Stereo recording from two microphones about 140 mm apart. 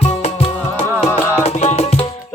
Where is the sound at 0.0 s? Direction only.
50° left (ahead or behind).